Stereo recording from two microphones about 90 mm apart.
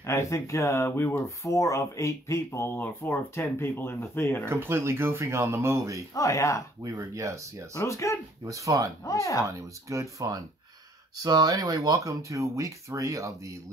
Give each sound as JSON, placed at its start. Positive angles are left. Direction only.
{"t": 0.0, "sound": "speech", "side_deg": 30}
{"t": 4.5, "sound": "speech", "side_deg": -30}
{"t": 6.1, "sound": "speech", "side_deg": 35}
{"t": 6.8, "sound": "speech", "side_deg": -35}
{"t": 7.7, "sound": "speech", "side_deg": 35}
{"t": 8.5, "sound": "speech", "side_deg": -40}
{"t": 9.0, "sound": "speech", "side_deg": 35}
{"t": 9.5, "sound": "speech", "side_deg": -35}